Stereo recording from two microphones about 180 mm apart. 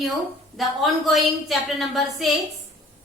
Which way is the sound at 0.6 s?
Centre (ahead or behind).